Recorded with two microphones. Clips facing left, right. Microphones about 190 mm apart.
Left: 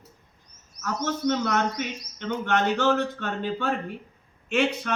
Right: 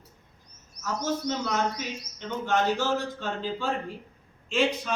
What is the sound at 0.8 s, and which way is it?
A man's voice, 65° left (ahead or behind).